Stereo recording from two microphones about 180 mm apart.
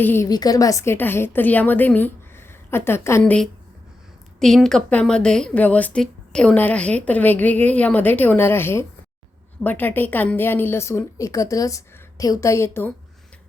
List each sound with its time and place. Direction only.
0.0 s a woman's voice: 10° left (ahead or behind)
4.4 s a woman's voice: centre (ahead or behind)